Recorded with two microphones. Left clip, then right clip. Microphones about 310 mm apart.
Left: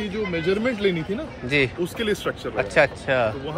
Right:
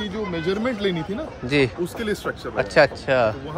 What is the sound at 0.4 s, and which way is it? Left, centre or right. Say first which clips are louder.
Speech: left 1 dB; centre.